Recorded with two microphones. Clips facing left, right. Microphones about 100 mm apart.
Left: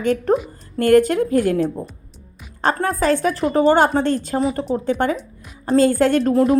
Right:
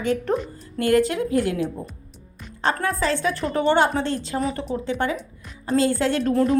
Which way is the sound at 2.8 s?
45° left (ahead or behind).